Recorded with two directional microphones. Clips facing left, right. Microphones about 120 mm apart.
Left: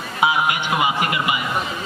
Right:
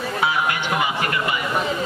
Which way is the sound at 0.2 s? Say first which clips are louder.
Left 4 dB; 15° left (ahead or behind).